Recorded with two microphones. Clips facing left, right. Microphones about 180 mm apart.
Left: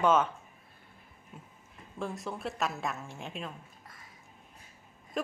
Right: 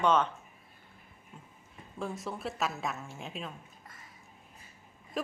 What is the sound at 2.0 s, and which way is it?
A woman's voice, centre (ahead or behind).